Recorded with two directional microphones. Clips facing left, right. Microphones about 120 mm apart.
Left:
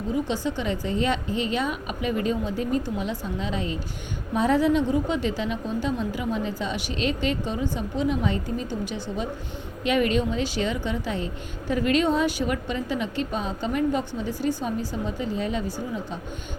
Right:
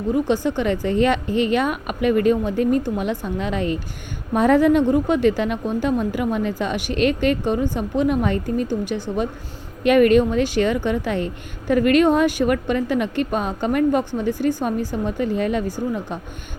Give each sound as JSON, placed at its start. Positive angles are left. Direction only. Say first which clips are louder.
{"t": 0.4, "sound": "a woman's voice", "louder": "right 6 dB", "side_deg": -60}